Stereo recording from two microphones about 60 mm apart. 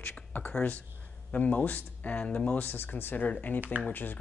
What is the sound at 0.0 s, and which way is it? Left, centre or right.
Speech, left.